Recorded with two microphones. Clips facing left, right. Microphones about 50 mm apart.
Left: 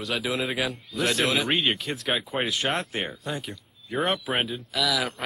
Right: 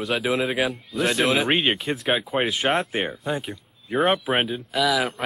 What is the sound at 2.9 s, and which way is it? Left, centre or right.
Speech, centre.